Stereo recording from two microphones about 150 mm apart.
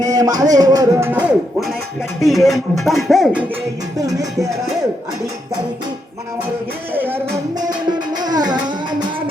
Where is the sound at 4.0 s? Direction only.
20° right (ahead or behind).